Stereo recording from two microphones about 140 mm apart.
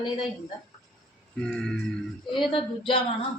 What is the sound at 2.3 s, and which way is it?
Speech, 35° left (ahead or behind).